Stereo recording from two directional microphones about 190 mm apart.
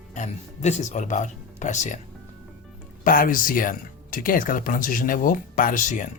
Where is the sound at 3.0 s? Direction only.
45° left (ahead or behind).